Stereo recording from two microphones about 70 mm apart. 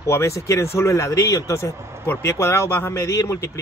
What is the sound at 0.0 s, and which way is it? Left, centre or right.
A man's voice, left.